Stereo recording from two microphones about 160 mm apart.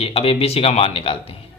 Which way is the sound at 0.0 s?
35° left (ahead or behind).